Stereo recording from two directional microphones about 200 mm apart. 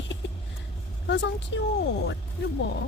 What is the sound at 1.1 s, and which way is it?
Speech, 60° left (ahead or behind).